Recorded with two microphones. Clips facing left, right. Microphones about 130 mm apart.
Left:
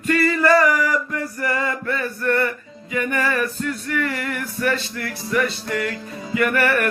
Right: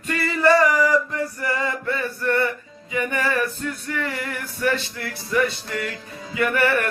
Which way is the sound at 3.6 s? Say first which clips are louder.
Left 3 dB; 20° right (ahead or behind).